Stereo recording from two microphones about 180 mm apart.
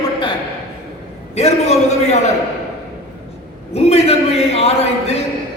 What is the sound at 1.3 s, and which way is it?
Speech, 35° left (ahead or behind).